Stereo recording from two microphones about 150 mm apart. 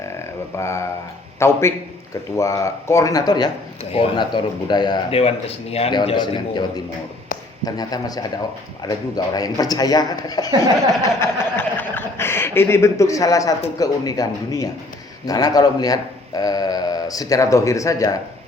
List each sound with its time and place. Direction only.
0.5 s a man's voice: 20° left (ahead or behind)
5.2 s speech: 45° left (ahead or behind)
6.1 s a man's voice: 30° left (ahead or behind)